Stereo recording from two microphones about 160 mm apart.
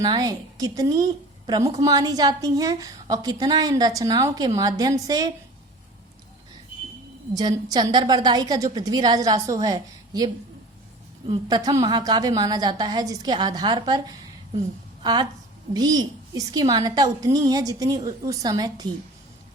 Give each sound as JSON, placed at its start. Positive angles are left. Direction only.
{"t": 0.0, "sound": "a woman's voice", "side_deg": -25}
{"t": 7.3, "sound": "a woman's voice", "side_deg": -25}